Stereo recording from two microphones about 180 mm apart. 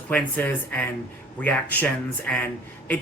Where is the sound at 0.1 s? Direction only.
10° left (ahead or behind).